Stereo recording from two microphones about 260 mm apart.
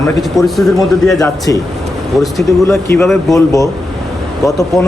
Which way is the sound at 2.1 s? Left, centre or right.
Centre.